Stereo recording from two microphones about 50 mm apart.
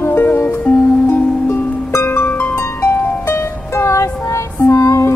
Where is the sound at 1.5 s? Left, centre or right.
Left.